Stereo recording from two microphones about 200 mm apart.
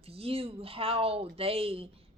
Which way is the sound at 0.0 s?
30° right (ahead or behind).